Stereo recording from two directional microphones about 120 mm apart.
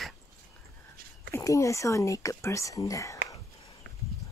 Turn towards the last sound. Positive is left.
turn(degrees=30)  # may be behind; listen again after turning